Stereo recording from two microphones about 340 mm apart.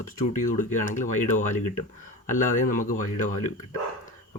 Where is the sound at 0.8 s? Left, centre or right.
Left.